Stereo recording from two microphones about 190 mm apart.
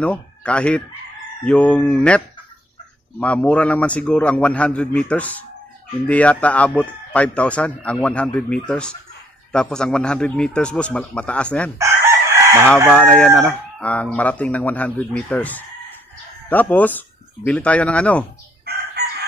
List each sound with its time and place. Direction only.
0.0 s a man's voice: 5° left (ahead or behind)
11.8 s chicken: 15° right (ahead or behind)
12.9 s speech: 5° left (ahead or behind)
19.0 s chicken: 55° right (ahead or behind)